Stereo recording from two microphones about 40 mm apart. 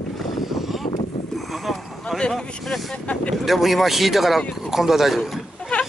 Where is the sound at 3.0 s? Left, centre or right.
Left.